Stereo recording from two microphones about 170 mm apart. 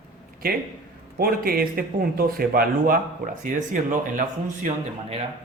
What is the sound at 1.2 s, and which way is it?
Speech, 60° right (ahead or behind).